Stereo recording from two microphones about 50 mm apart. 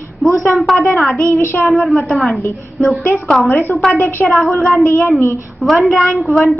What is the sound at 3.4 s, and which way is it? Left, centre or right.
Child singing, left.